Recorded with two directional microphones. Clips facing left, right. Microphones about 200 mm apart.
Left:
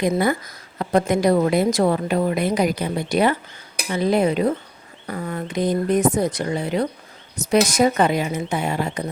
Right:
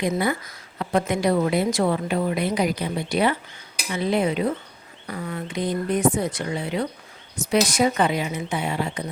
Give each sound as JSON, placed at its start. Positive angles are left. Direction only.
{"t": 0.8, "sound": "a woman's voice", "side_deg": 40}